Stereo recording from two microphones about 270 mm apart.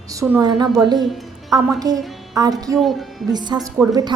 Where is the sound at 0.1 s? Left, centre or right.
Centre.